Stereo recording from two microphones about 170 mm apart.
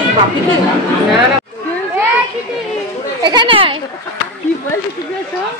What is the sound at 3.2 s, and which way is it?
Speech, 25° right (ahead or behind).